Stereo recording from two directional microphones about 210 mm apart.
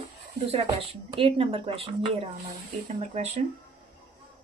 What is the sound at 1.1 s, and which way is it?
A woman's voice, 25° right (ahead or behind).